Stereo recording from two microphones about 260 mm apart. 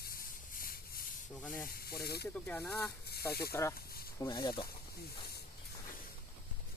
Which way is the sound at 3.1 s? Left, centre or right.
Left.